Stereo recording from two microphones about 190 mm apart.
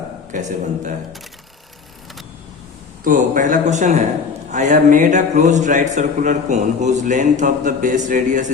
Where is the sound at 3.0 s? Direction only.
45° right (ahead or behind).